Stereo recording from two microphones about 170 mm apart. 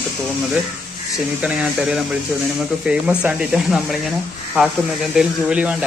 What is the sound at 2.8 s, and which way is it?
Speech, 5° right (ahead or behind).